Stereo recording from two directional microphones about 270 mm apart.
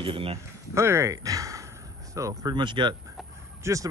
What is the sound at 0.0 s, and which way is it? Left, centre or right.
Speech, centre.